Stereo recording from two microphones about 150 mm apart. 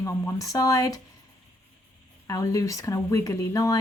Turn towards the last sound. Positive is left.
turn(degrees=20)  # may be behind; listen again after turning